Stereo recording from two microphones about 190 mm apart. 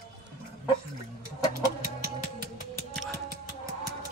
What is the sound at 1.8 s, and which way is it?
Music, 55° right (ahead or behind).